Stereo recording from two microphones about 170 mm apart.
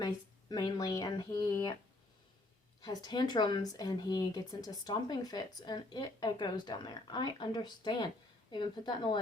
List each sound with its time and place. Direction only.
0.0 s speech: 25° left (ahead or behind)
2.8 s speech: 25° left (ahead or behind)